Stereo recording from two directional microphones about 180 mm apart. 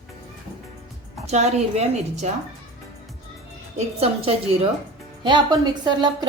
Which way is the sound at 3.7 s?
35° right (ahead or behind).